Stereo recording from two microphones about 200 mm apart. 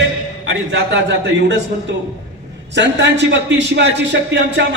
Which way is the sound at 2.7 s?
60° right (ahead or behind).